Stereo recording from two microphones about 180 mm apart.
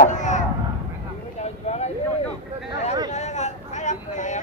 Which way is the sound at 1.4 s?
40° left (ahead or behind).